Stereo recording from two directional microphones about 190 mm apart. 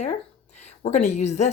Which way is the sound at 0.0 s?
35° left (ahead or behind).